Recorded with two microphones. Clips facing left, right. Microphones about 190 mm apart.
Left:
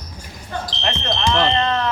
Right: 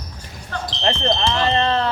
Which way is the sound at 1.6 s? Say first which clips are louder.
Right 1 dB; 30° right (ahead or behind).